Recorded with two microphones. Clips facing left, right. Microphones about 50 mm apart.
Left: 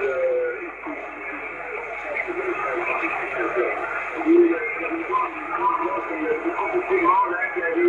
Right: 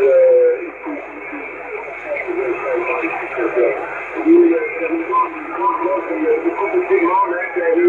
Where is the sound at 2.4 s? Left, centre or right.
Centre.